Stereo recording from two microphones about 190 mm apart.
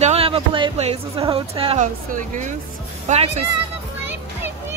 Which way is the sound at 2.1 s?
40° right (ahead or behind).